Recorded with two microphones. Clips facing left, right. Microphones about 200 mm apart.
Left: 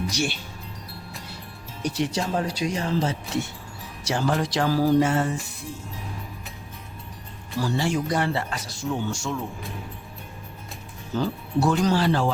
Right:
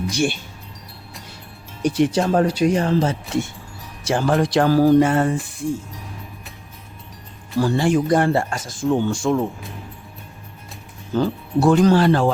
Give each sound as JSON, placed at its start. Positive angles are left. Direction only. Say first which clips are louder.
{"t": 0.1, "sound": "speech", "louder": "right 6 dB", "side_deg": -55}
{"t": 1.8, "sound": "speech", "louder": "right 8 dB", "side_deg": -55}
{"t": 7.6, "sound": "speech", "louder": "right 7 dB", "side_deg": -55}
{"t": 11.2, "sound": "speech", "louder": "right 5 dB", "side_deg": -55}